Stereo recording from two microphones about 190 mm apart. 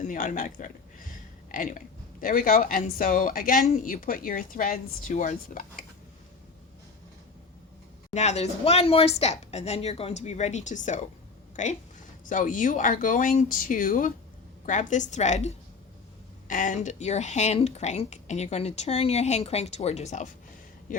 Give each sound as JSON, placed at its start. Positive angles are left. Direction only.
{"t": 0.0, "sound": "a sound", "side_deg": 45}
{"t": 2.2, "sound": "a woman's voice", "side_deg": 50}
{"t": 8.1, "sound": "a woman's voice", "side_deg": 35}